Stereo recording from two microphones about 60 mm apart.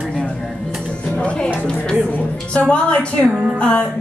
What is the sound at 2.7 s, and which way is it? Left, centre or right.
Speech, centre.